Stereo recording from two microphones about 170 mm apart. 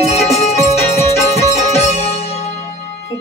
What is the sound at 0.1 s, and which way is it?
Music, 40° left (ahead or behind).